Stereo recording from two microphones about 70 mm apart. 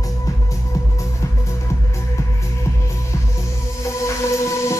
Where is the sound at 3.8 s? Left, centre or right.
Left.